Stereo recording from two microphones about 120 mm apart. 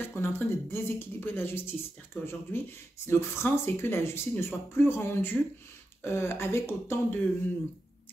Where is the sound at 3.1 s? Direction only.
20° left (ahead or behind).